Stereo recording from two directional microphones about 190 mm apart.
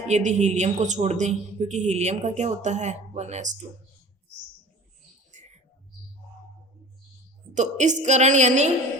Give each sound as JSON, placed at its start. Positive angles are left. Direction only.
{"t": 0.1, "sound": "speech", "side_deg": -40}
{"t": 7.5, "sound": "speech", "side_deg": -40}